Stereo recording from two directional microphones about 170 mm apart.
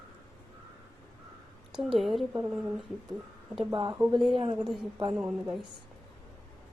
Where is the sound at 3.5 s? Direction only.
30° right (ahead or behind).